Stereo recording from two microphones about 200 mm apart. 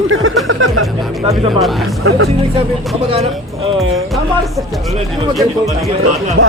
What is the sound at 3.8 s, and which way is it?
Speech, centre (ahead or behind).